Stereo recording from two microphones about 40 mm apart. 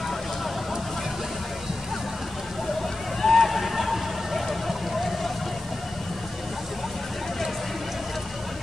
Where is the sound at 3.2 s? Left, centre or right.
Centre.